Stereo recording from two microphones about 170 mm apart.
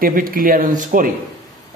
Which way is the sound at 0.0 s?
55° right (ahead or behind).